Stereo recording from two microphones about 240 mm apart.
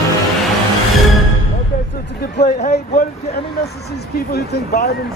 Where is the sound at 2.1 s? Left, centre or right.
Left.